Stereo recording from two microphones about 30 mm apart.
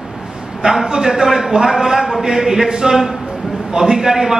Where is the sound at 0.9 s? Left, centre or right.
Right.